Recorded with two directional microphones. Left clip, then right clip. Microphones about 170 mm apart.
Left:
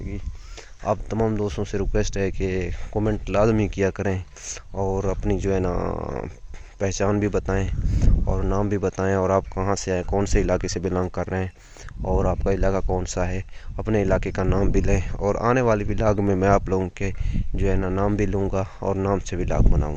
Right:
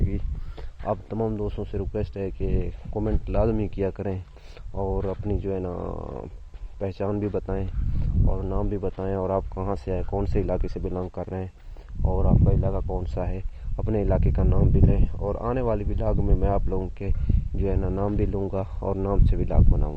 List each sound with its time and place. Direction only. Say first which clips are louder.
0.8 s speech: left 4 dB; 5° left (ahead or behind)
1.2 s speech: left 4 dB; 15° left (ahead or behind)
6.7 s speech: left 5 dB; 10° left (ahead or behind)
8.3 s speech: left 5 dB; 20° left (ahead or behind)
12.0 s speech: left 4 dB; 25° left (ahead or behind)
13.0 s speech: left 5 dB; 10° left (ahead or behind)